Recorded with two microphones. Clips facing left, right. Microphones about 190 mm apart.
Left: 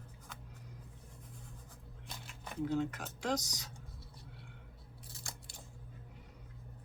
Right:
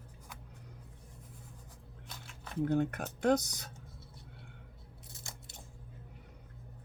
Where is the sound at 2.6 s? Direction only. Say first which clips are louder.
Right 4 dB; 60° right (ahead or behind).